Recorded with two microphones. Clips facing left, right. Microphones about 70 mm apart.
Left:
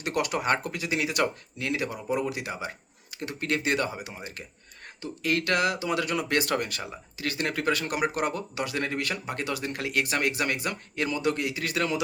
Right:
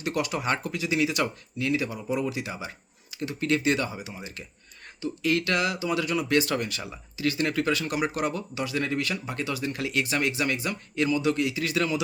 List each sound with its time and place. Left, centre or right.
0.0 s speech: left